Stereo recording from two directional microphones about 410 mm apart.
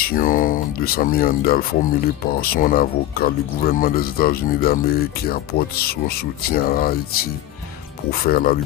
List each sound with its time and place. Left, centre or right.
0.0 s speech: centre